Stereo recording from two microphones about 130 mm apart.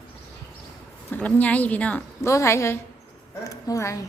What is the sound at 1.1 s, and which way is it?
A woman's voice, 10° left (ahead or behind).